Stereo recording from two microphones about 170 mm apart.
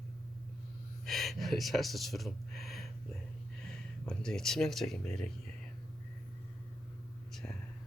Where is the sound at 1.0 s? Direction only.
Centre (ahead or behind).